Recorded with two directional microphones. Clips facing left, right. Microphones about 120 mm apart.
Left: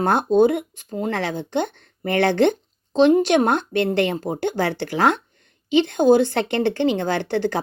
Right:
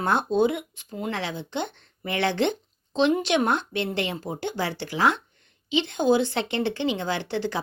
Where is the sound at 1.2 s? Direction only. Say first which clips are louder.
Left 6 dB; 50° left (ahead or behind).